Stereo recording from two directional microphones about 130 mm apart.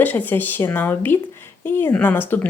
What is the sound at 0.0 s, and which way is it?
A woman's voice, 15° left (ahead or behind).